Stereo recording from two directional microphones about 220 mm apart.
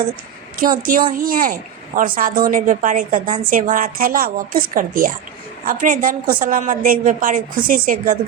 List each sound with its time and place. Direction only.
0.6 s a woman's voice: 40° right (ahead or behind)